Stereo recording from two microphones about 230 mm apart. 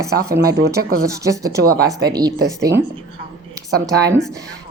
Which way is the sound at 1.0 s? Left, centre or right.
Centre.